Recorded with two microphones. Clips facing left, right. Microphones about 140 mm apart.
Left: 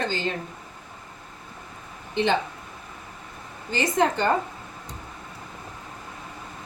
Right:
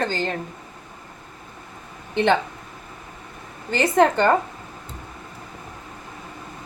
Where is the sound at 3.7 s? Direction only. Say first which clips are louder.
Right 5 dB; 60° right (ahead or behind).